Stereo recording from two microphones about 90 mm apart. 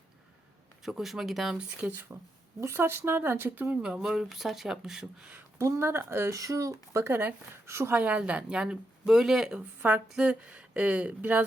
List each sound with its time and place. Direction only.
0.8 s speech: 5° right (ahead or behind)
1.8 s speech: 20° right (ahead or behind)
5.5 s speech: 30° right (ahead or behind)
7.0 s speech: 25° right (ahead or behind)
7.9 s speech: 15° right (ahead or behind)